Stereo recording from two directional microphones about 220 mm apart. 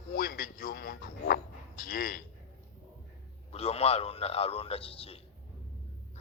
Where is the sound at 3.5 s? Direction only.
25° left (ahead or behind).